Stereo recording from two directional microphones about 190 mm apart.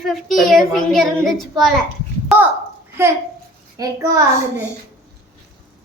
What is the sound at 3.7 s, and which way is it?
Speech, 15° right (ahead or behind).